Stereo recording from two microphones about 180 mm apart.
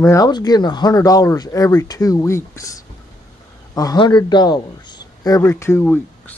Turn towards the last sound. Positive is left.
turn(degrees=10)  # may be behind; listen again after turning